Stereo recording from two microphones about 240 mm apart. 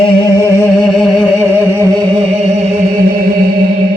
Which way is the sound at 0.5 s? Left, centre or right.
Centre.